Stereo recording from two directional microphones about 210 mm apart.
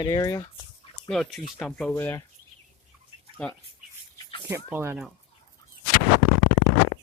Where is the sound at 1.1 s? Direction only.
Centre (ahead or behind).